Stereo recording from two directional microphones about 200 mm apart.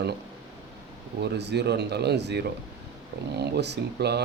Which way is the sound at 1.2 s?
55° right (ahead or behind).